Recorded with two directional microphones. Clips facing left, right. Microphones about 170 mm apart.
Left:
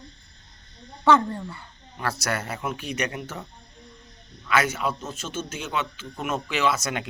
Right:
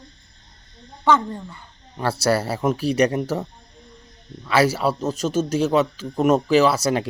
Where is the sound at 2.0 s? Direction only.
30° right (ahead or behind).